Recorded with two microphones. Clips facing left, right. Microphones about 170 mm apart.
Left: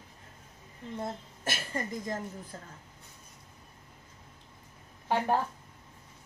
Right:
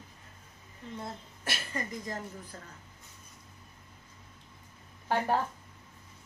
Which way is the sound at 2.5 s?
35° left (ahead or behind).